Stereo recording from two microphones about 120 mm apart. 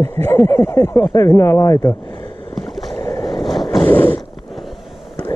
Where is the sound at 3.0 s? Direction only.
30° left (ahead or behind).